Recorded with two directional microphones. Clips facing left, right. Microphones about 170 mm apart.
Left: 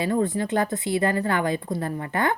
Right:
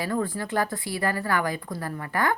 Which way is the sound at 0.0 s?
20° left (ahead or behind).